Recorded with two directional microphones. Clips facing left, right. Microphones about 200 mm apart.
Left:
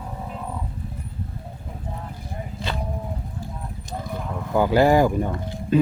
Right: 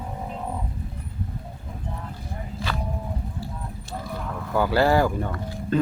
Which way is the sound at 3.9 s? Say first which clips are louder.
Left 2 dB; 15° left (ahead or behind).